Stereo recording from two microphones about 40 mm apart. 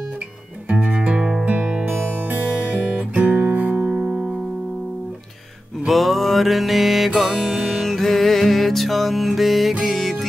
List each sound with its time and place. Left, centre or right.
0.7 s music: right
1.4 s music: right
1.9 s music: right
2.7 s guitar: right
3.2 s guitar: right
5.9 s music: centre